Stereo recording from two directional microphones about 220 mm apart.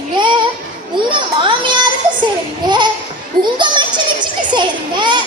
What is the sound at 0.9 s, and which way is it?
A child's voice, 20° right (ahead or behind).